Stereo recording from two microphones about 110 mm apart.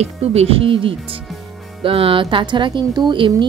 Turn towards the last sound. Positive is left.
turn(degrees=-45)  # may be behind; listen again after turning